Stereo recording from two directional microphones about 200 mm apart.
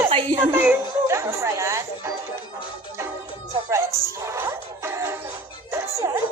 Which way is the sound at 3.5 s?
15° right (ahead or behind).